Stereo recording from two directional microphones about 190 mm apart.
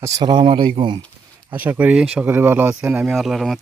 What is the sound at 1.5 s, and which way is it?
Speech, 10° right (ahead or behind).